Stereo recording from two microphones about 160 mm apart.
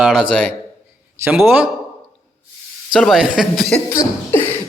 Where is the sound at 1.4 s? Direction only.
10° right (ahead or behind).